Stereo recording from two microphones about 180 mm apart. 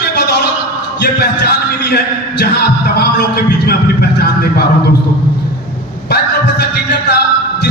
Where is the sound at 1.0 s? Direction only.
65° left (ahead or behind).